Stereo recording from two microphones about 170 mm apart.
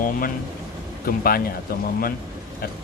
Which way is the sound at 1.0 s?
60° left (ahead or behind).